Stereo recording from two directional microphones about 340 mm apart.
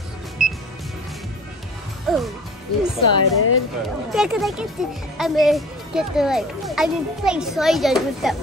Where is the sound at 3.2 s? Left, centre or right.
Left.